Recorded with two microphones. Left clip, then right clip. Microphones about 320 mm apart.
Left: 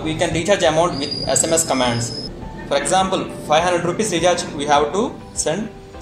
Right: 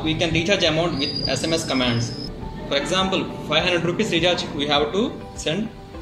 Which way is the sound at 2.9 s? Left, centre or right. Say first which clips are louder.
Left 4 dB; centre.